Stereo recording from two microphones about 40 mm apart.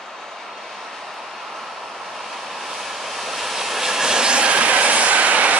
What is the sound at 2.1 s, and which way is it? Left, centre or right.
Vehicle, centre.